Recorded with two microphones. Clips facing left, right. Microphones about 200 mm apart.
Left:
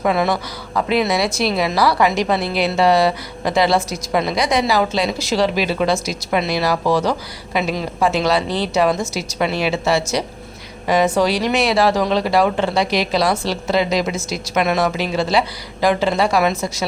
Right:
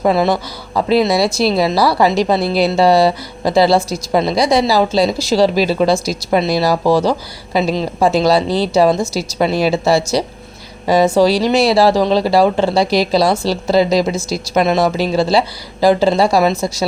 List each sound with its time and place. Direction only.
0.0 s speech: 30° right (ahead or behind)